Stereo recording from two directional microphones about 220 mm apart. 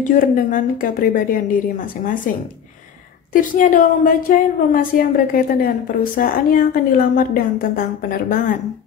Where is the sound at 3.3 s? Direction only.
40° left (ahead or behind).